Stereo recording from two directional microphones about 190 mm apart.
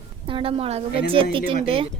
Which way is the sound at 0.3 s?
30° right (ahead or behind).